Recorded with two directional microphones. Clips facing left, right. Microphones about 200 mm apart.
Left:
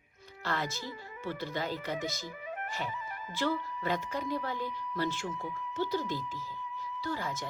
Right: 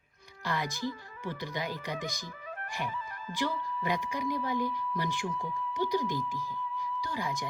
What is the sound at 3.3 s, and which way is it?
Speech, 15° right (ahead or behind).